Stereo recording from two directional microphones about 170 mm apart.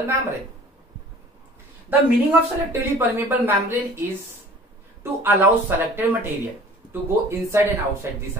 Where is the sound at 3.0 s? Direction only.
10° right (ahead or behind).